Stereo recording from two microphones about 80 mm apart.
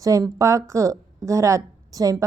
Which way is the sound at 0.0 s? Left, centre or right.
Right.